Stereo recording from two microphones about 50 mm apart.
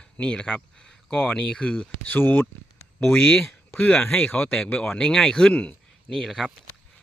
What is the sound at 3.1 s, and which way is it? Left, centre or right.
Speech, left.